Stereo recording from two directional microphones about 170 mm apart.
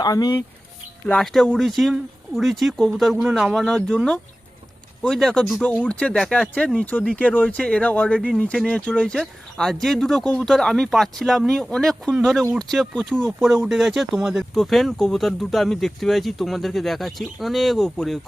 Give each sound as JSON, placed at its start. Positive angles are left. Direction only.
{"t": 0.0, "sound": "speech", "side_deg": 20}
{"t": 1.0, "sound": "speech", "side_deg": 5}